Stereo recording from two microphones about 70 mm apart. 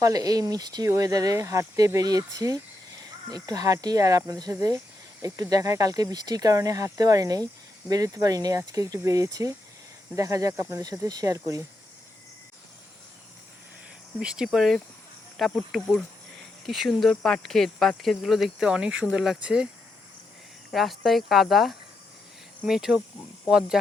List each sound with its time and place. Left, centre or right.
0.0 s speech: right
0.9 s speech: right
1.4 s speech: right
11.0 s speech: right
14.2 s speech: centre
19.4 s speech: centre
20.7 s speech: centre